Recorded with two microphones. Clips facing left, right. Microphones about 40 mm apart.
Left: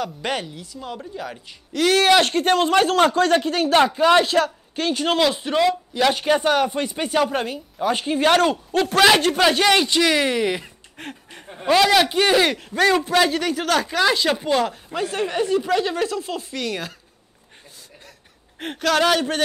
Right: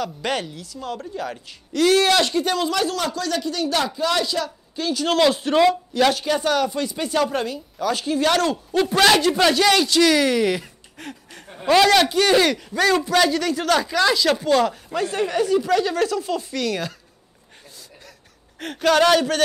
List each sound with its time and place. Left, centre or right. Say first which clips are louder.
0.0 s speech: right 1 dB; centre
1.7 s speech: left 1 dB; left
5.2 s speech: right 4 dB; centre
6.1 s speech: left 2 dB; left
8.9 s speech: left 1 dB; centre
9.5 s speech: even; left; by 10.7 s centre
11.0 s speech: left 1 dB; left
11.7 s speech: right 1 dB; centre
12.1 s speech: even; centre
12.5 s speech: left 1 dB; left
14.6 s speech: right 2 dB; centre
16.0 s speech: right 2 dB; centre
18.8 s speech: right 2 dB; centre